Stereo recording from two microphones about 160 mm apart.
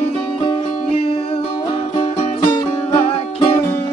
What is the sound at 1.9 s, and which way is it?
Music, 30° left (ahead or behind).